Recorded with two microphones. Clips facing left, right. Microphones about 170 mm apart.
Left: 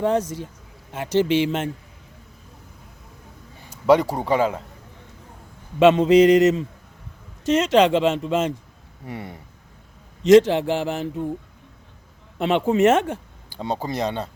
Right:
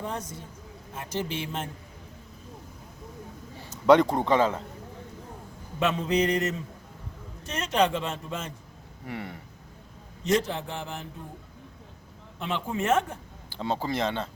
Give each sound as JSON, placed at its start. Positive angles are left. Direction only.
{"t": 0.0, "sound": "speech", "side_deg": 85}
{"t": 3.7, "sound": "a man's voice", "side_deg": 10}
{"t": 5.8, "sound": "speech", "side_deg": 90}
{"t": 9.0, "sound": "speech", "side_deg": 25}
{"t": 10.2, "sound": "speech", "side_deg": 90}
{"t": 12.4, "sound": "speech", "side_deg": 75}
{"t": 13.5, "sound": "a man's voice", "side_deg": 15}